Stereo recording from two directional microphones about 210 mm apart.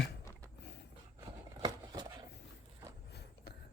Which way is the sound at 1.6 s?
20° right (ahead or behind).